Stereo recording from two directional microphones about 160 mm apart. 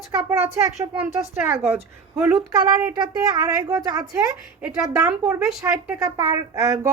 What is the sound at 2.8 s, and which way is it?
A woman's voice, 20° right (ahead or behind).